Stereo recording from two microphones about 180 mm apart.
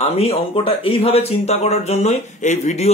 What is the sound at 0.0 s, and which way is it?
Speech, 35° left (ahead or behind).